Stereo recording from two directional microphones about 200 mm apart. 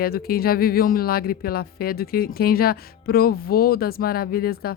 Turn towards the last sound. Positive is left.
turn(degrees=50)  # may be behind; listen again after turning